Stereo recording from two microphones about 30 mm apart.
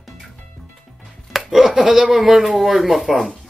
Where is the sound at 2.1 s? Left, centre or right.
Centre.